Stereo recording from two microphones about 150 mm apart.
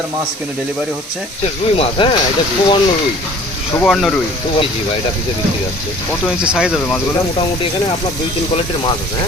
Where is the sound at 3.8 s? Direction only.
Centre (ahead or behind).